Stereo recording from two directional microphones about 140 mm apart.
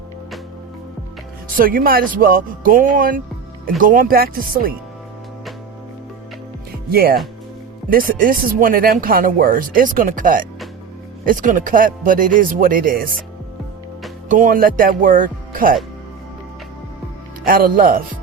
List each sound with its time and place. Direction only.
1.5 s speech: 90° right
6.9 s speech: 90° right
14.3 s speech: 70° right (ahead or behind)
17.4 s speech: 90° right